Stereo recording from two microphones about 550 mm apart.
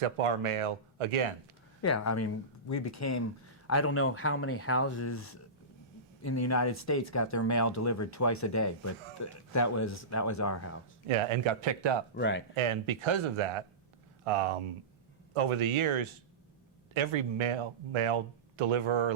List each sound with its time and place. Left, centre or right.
0.0 s speech: right
1.8 s speech: left
6.2 s speech: left
11.1 s speech: right
12.1 s speech: centre
12.5 s speech: right